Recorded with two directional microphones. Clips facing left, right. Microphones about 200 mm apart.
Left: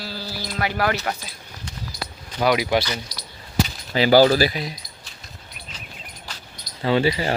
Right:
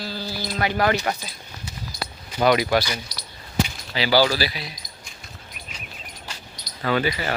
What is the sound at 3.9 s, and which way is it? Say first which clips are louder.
Speech: left 6 dB; 45° left (ahead or behind).